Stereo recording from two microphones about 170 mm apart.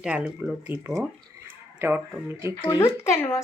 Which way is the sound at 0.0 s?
5° right (ahead or behind).